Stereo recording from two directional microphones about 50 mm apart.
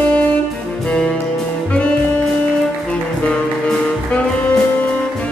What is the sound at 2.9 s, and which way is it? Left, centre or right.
Music, left.